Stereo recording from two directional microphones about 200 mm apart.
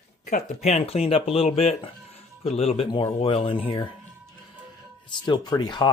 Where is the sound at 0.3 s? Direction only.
35° left (ahead or behind).